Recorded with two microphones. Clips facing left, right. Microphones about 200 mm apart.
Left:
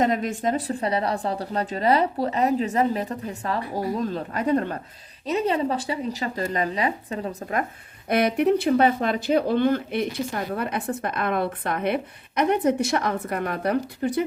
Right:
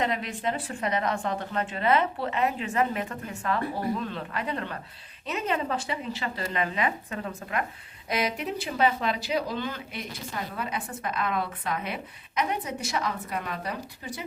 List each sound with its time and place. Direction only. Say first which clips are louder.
0.0 s a woman's voice: left 6 dB; 45° left (ahead or behind)
8.1 s speech: left 9 dB; 60° left (ahead or behind)